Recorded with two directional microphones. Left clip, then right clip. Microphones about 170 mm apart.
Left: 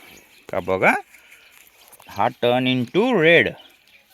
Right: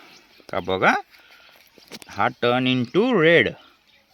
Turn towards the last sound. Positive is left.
turn(degrees=-5)  # may be behind; listen again after turning